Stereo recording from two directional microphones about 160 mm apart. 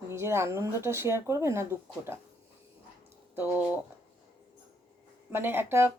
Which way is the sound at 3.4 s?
10° right (ahead or behind).